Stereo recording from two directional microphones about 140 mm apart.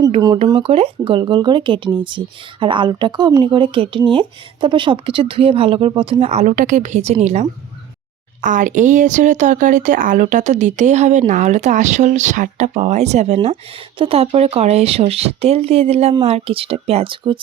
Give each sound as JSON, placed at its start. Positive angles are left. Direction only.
{"t": 0.4, "sound": "speech", "side_deg": -40}
{"t": 8.4, "sound": "speech", "side_deg": -70}